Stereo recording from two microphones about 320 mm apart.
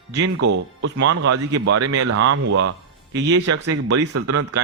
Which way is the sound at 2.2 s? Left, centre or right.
Right.